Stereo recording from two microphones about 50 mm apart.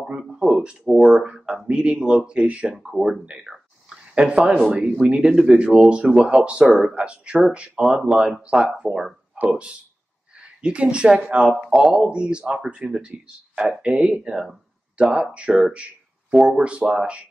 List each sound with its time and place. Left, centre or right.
0.4 s speech: centre
0.8 s speech: centre
1.1 s speech: centre
2.7 s speech: centre
3.9 s a sound: right
4.7 s speech: centre
6.1 s speech: centre
6.4 s speech: centre
11.5 s speech: centre
11.9 s speech: right
13.6 s speech: centre